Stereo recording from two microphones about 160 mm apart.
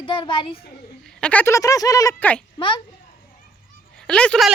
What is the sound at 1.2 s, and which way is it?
Speech, 10° left (ahead or behind).